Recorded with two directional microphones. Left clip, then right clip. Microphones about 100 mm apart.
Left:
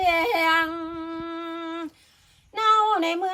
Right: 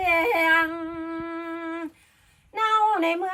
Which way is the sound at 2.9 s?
30° left (ahead or behind).